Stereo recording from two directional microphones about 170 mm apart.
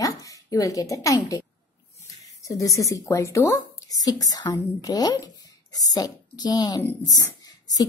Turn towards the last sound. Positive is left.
turn(degrees=20)  # may be behind; listen again after turning